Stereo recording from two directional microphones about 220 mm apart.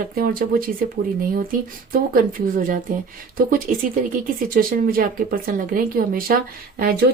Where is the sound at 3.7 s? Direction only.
35° right (ahead or behind).